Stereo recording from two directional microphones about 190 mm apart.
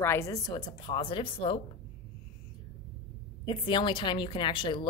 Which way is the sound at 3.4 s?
25° left (ahead or behind).